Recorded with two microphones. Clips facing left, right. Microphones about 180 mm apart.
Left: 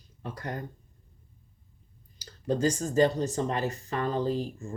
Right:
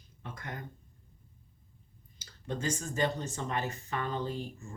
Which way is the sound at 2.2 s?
35° left (ahead or behind).